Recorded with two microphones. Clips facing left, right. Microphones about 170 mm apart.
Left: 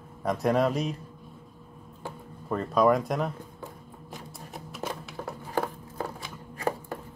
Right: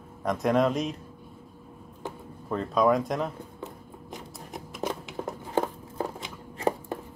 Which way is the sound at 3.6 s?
15° right (ahead or behind).